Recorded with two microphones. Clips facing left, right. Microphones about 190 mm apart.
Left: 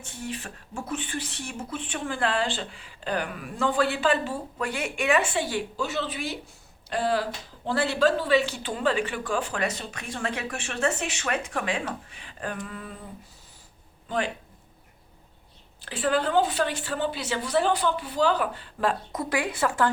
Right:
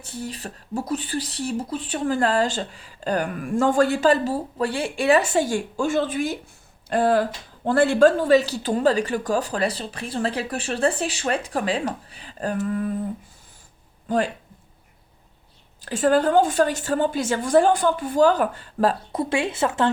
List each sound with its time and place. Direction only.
0.0 s speech: 35° right (ahead or behind)
15.8 s a woman's voice: 45° right (ahead or behind); by 19.9 s 25° right (ahead or behind)